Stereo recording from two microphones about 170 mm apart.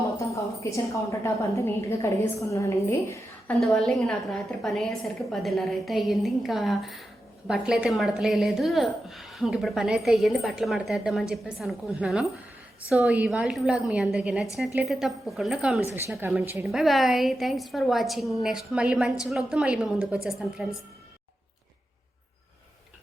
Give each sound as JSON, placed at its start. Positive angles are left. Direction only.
{"t": 0.2, "sound": "a sound", "side_deg": 20}
{"t": 1.2, "sound": "a woman's voice", "side_deg": 15}
{"t": 3.4, "sound": "a woman's voice", "side_deg": 5}
{"t": 16.6, "sound": "a woman's voice", "side_deg": 0}